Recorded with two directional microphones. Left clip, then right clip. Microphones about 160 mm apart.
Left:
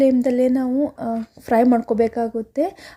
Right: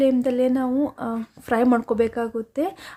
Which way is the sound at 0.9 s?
20° left (ahead or behind).